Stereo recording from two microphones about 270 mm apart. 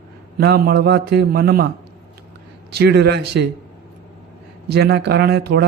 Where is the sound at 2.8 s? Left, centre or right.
Right.